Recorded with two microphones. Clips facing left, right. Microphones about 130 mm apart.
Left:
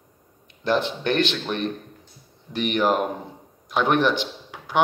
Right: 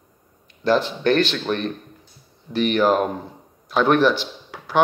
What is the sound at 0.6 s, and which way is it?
A man's voice, 20° left (ahead or behind).